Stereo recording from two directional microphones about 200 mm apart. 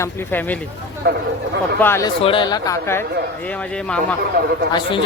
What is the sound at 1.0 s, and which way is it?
Speech, 60° right (ahead or behind).